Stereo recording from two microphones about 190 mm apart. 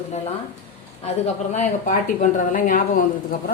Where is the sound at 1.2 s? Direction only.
35° left (ahead or behind).